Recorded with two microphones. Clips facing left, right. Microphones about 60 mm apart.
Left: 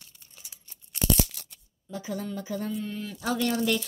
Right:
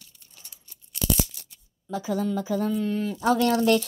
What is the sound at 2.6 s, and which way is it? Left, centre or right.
Speech, right.